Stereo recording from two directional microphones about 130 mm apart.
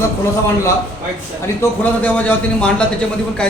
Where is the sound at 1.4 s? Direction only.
20° left (ahead or behind).